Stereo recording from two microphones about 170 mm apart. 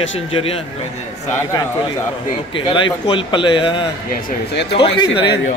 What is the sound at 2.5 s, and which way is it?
A man's voice, 30° left (ahead or behind).